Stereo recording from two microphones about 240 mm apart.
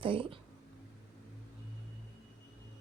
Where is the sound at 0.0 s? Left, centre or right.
Right.